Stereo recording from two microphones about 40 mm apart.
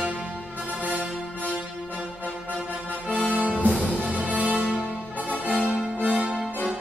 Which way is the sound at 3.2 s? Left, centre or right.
Right.